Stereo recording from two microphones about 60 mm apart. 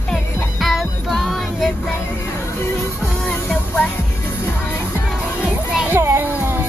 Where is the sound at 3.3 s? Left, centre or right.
Left.